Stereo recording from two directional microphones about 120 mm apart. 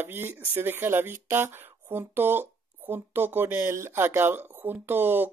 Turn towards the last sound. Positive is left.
turn(degrees=-15)  # may be behind; listen again after turning